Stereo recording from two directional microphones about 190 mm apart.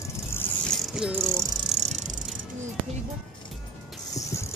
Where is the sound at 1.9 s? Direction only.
40° right (ahead or behind).